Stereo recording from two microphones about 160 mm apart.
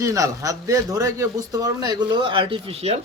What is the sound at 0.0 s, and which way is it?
A man's voice, 20° right (ahead or behind).